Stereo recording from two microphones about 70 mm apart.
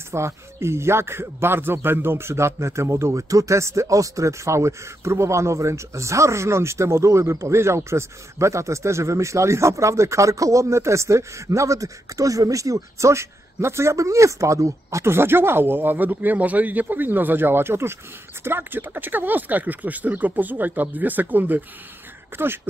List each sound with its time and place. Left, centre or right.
0.1 s speech: right